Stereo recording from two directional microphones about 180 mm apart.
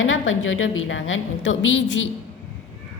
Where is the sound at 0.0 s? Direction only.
90° left.